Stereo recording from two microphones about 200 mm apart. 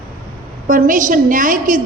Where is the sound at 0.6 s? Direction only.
40° right (ahead or behind).